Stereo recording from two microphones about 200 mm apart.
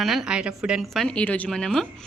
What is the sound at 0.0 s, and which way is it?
A woman's voice, centre (ahead or behind).